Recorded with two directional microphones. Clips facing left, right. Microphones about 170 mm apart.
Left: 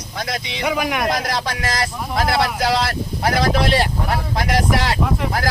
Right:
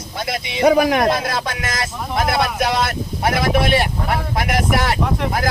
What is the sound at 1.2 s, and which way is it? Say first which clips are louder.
Speech: even; 25° right (ahead or behind).